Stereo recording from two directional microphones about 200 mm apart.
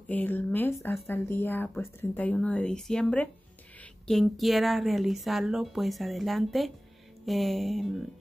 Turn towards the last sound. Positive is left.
turn(degrees=0)  # may be behind; listen again after turning